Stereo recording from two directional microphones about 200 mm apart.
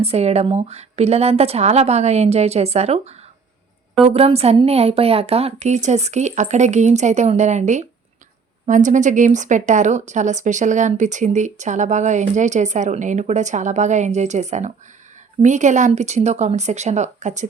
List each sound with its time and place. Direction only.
0.0 s speech: 30° right (ahead or behind)